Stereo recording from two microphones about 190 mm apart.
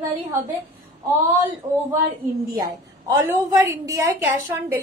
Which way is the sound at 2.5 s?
20° right (ahead or behind).